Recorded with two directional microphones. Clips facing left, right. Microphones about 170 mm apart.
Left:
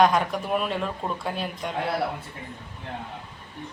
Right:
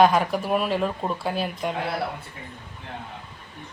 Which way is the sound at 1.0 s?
25° right (ahead or behind).